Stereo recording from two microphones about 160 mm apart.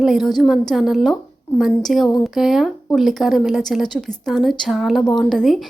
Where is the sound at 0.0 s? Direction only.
Centre (ahead or behind).